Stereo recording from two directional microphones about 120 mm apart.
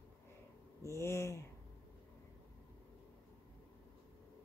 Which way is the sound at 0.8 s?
20° left (ahead or behind).